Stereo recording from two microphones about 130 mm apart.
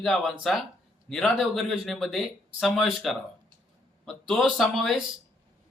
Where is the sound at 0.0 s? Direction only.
Centre (ahead or behind).